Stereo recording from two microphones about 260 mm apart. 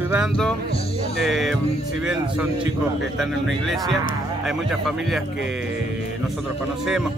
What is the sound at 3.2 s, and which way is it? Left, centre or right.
Speech, centre.